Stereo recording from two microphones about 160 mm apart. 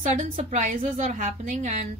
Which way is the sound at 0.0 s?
50° right (ahead or behind).